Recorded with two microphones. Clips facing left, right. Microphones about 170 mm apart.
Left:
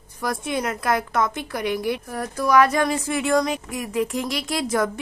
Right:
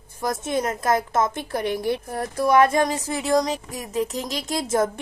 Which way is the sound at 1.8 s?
25° right (ahead or behind).